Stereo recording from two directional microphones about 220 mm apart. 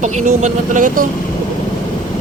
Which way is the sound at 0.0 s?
35° right (ahead or behind).